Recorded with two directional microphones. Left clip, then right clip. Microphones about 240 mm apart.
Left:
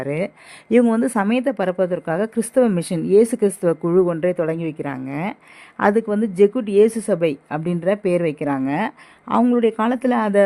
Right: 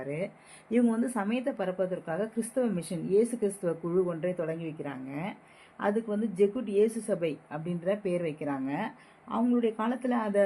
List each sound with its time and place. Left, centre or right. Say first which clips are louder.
0.0 s a woman's voice: left 11 dB; left